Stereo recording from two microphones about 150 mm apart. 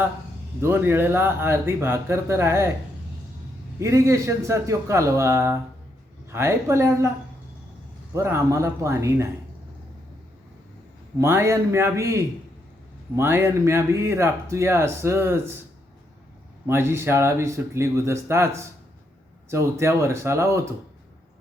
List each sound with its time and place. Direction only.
0.6 s speech: 15° right (ahead or behind)
3.8 s a man's voice: 20° right (ahead or behind)
8.1 s a man's voice: 20° right (ahead or behind)
11.2 s a man's voice: 15° right (ahead or behind)
16.6 s a man's voice: 15° right (ahead or behind)